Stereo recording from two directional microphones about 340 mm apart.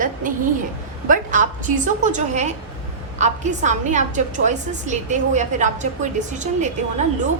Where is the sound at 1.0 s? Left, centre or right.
Right.